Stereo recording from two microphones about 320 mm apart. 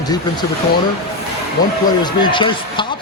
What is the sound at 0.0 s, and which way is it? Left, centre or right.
Speech, centre.